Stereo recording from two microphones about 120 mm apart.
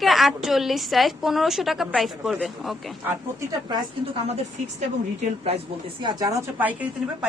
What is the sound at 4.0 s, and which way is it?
A woman's voice, 65° right (ahead or behind).